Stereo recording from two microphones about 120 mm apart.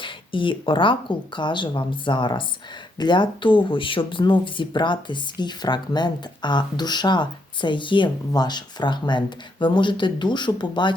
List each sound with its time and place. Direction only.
0.0 s speech: 45° left (ahead or behind)